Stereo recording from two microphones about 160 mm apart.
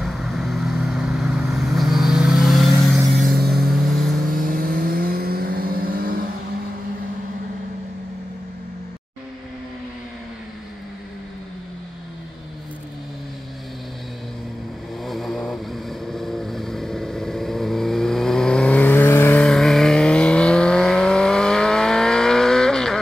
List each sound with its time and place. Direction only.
0.0 s vehicle: centre (ahead or behind)
4.3 s vehicle: 60° right (ahead or behind)
15.0 s vehicle: centre (ahead or behind)
19.4 s vehicle: centre (ahead or behind)